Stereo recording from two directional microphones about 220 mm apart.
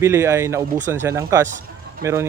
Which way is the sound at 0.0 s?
10° right (ahead or behind).